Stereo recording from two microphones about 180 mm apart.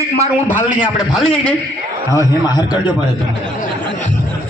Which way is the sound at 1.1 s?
5° left (ahead or behind).